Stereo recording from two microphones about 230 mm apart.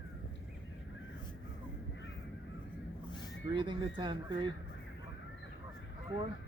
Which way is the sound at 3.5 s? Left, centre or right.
Centre.